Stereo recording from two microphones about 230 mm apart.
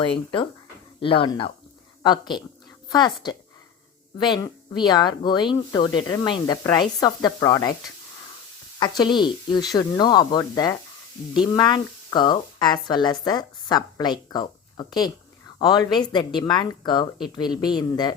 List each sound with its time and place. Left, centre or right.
0.9 s speech: left
8.8 s speech: centre